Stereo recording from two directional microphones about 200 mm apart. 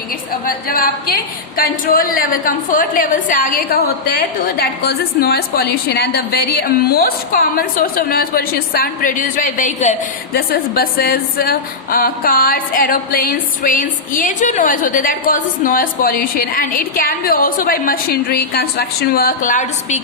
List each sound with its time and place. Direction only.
0.4 s speech: 45° left (ahead or behind)